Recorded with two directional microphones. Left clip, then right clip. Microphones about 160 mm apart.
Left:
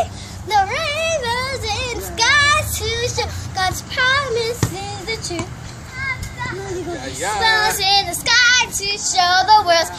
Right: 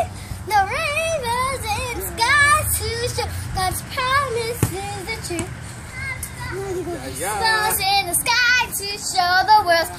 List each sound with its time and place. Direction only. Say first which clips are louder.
0.0 s child singing: left 2 dB; centre (ahead or behind); by 2.0 s 15° left (ahead or behind)
2.1 s child singing: left 1 dB; centre (ahead or behind)
3.5 s child singing: left 4 dB; 5° left (ahead or behind)
7.3 s child singing: left 3 dB; 5° right (ahead or behind)